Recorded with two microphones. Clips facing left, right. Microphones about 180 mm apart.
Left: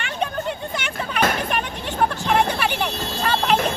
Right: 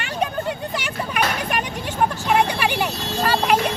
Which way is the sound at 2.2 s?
10° right (ahead or behind).